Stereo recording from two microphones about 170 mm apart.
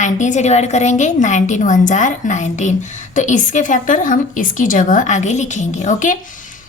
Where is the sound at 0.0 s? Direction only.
45° left (ahead or behind).